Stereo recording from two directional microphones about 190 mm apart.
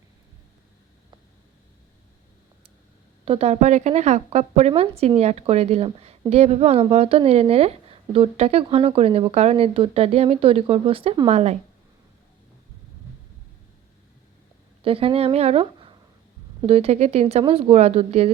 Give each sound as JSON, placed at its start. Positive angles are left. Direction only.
{"t": 3.2, "sound": "a woman's voice", "side_deg": -30}
{"t": 14.8, "sound": "a woman's voice", "side_deg": -30}